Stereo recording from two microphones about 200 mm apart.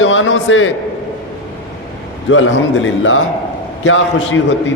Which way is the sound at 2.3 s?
75° left (ahead or behind).